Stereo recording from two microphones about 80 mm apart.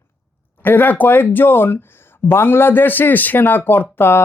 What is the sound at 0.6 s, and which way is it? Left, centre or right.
Speech, left.